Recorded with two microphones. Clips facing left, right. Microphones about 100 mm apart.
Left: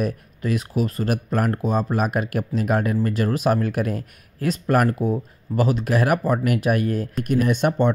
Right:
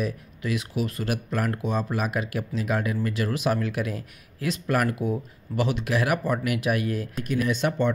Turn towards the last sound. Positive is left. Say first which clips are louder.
# left 4 dB
turn(degrees=50)  # may be behind; listen again after turning